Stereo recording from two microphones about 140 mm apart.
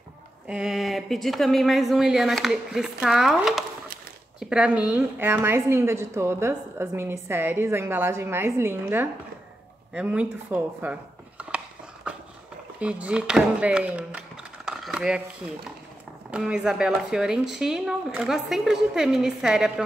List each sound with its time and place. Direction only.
0.5 s a woman's voice: 5° right (ahead or behind)
9.9 s a sound: 10° right (ahead or behind)
12.7 s speech: 10° right (ahead or behind)
16.3 s speech: 10° right (ahead or behind)